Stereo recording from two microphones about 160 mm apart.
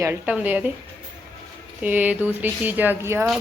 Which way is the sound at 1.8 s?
10° right (ahead or behind).